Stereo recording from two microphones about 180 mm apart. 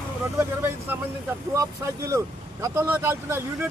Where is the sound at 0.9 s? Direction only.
10° right (ahead or behind).